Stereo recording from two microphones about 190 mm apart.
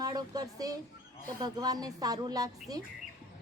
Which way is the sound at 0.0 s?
20° right (ahead or behind).